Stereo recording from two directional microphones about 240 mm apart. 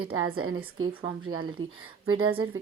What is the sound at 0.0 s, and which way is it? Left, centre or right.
Speech, right.